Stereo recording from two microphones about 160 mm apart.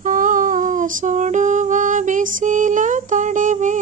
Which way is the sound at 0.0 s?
55° right (ahead or behind).